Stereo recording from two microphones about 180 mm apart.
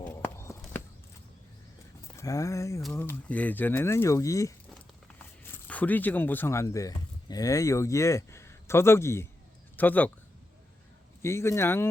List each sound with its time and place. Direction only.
0.0 s a sound: 15° left (ahead or behind)
2.1 s speech: 20° left (ahead or behind)
11.2 s speech: 15° left (ahead or behind)